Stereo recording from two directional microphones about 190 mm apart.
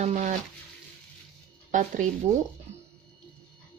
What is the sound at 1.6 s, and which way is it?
Speech, 40° right (ahead or behind).